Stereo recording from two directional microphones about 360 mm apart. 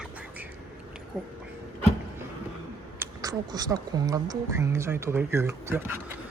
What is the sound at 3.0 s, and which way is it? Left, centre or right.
Speech, centre.